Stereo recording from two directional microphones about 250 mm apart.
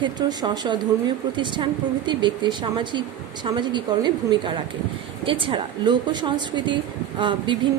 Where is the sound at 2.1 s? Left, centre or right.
Centre.